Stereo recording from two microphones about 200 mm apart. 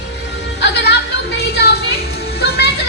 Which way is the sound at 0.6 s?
55° left (ahead or behind).